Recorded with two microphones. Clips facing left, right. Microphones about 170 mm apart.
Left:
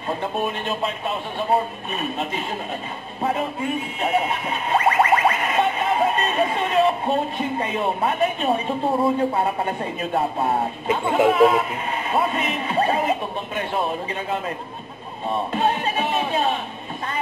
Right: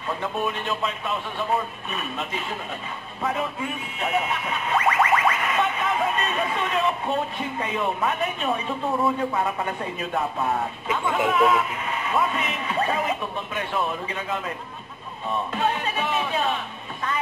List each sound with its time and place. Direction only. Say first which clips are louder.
0.1 s speech: left 2 dB; 30° left (ahead or behind)
3.2 s a sound: left 3 dB; 35° left (ahead or behind)
7.5 s speech: left 1 dB; 35° left (ahead or behind)
15.5 s music: left 4 dB; 30° left (ahead or behind)